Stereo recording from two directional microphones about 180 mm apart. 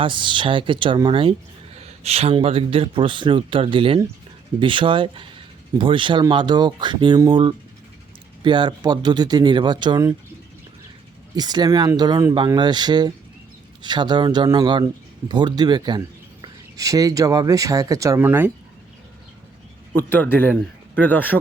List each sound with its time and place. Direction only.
0.0 s speech: 25° right (ahead or behind)
11.3 s speech: 20° right (ahead or behind)
20.0 s speech: 10° left (ahead or behind)